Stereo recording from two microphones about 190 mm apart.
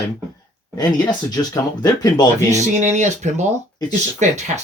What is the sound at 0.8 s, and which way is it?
Speech, 20° left (ahead or behind).